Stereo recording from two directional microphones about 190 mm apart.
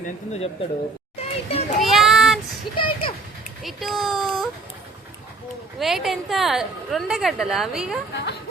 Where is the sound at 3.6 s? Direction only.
Centre (ahead or behind).